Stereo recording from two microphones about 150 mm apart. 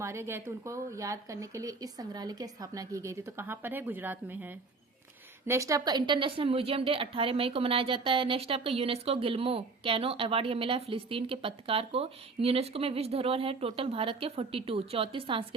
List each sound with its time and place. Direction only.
0.0 s a woman's voice: 20° right (ahead or behind); by 15.4 s 35° right (ahead or behind)